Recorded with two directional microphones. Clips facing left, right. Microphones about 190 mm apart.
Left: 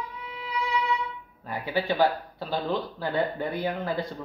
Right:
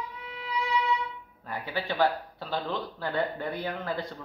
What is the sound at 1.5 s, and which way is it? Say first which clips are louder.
Speech: left 5 dB; 10° left (ahead or behind).